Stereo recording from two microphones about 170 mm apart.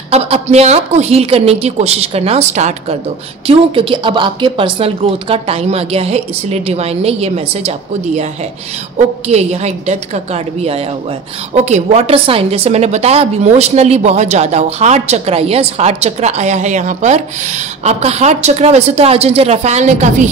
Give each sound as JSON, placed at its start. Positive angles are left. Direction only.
{"t": 0.1, "sound": "a woman's voice", "side_deg": -40}
{"t": 9.3, "sound": "a woman's voice", "side_deg": -40}